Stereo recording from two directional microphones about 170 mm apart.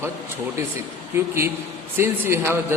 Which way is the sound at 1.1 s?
10° right (ahead or behind).